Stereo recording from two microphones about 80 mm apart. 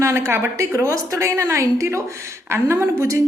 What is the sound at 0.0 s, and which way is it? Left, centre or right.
A woman's voice, right.